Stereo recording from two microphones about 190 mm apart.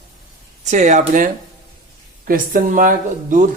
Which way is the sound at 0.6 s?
40° right (ahead or behind).